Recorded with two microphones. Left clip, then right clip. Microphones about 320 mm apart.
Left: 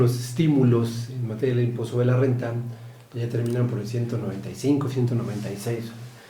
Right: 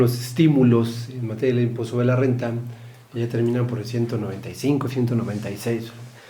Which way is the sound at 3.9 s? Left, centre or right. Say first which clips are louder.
Right 4 dB; right.